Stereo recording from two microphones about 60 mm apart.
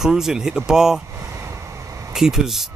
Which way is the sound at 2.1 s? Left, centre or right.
Centre.